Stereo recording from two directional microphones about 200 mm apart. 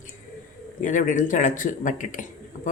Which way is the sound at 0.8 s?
40° left (ahead or behind).